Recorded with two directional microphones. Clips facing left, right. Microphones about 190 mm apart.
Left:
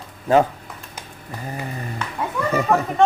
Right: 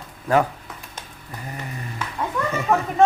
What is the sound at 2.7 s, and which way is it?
Speech, centre (ahead or behind).